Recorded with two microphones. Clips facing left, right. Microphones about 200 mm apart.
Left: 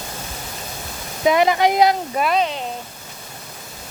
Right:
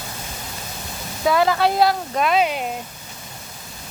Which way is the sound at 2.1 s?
Centre (ahead or behind).